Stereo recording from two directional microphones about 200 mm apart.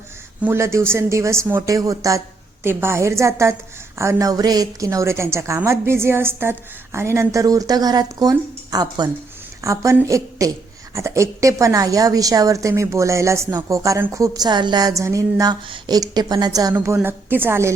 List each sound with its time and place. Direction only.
0.4 s a woman's voice: 10° right (ahead or behind)